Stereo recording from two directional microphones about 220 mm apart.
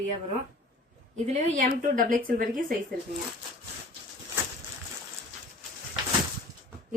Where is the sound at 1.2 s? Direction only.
35° right (ahead or behind).